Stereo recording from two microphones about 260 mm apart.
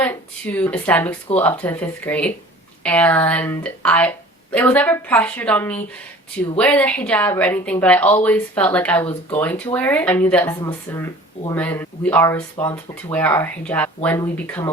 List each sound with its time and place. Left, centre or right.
0.0 s a woman's voice: centre